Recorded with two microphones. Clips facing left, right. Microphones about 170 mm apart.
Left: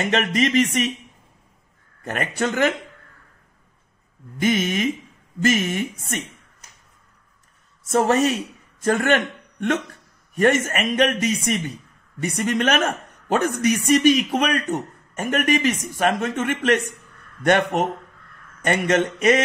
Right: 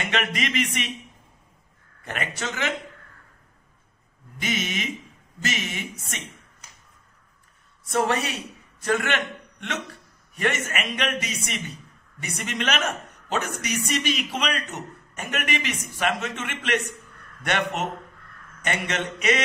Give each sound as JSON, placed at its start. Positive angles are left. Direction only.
{"t": 0.0, "sound": "speech", "side_deg": 40}
{"t": 2.0, "sound": "a woman's voice", "side_deg": 45}
{"t": 4.4, "sound": "a woman's voice", "side_deg": 50}
{"t": 7.9, "sound": "a man's voice", "side_deg": 40}